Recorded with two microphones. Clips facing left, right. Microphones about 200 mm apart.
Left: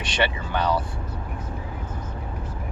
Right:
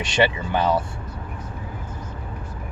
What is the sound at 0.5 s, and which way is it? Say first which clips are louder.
Speech: right 3 dB; 25° right (ahead or behind).